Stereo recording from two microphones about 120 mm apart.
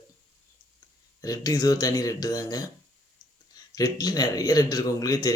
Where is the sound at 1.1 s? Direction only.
30° left (ahead or behind).